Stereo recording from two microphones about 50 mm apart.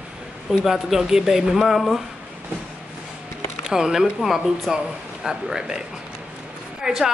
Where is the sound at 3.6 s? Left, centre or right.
Centre.